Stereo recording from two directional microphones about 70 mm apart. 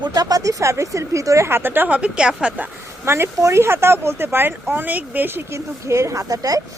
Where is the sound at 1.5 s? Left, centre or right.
Right.